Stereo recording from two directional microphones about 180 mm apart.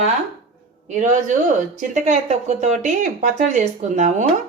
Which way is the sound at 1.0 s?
45° right (ahead or behind).